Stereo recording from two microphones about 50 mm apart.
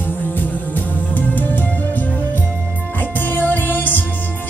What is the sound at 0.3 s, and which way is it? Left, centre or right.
Music, left.